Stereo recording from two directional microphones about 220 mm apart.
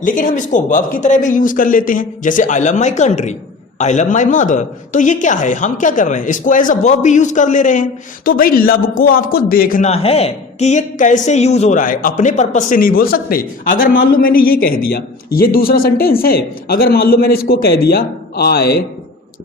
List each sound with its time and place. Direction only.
0.0 s a woman's voice: 35° left (ahead or behind)